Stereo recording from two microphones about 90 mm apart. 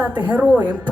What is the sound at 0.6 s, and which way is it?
Speech, 45° right (ahead or behind).